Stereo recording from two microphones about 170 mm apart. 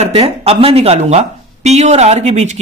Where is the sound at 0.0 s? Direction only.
35° right (ahead or behind).